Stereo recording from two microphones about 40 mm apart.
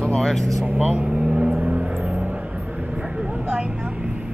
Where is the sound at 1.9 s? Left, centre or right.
Right.